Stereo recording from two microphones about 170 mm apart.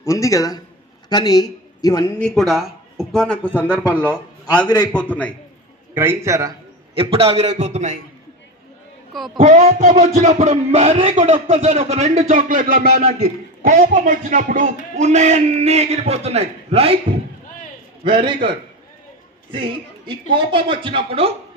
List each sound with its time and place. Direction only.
0.0 s a man's voice: 20° left (ahead or behind)
2.1 s a man's voice: 5° left (ahead or behind)
5.9 s a man's voice: 15° right (ahead or behind)
6.9 s speech: 35° right (ahead or behind)
9.1 s speech: centre (ahead or behind)
9.4 s a man's voice: 40° right (ahead or behind)
18.0 s speech: 30° right (ahead or behind)
19.5 s speech: 30° right (ahead or behind)